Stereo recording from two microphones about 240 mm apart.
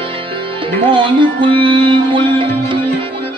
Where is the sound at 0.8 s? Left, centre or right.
Right.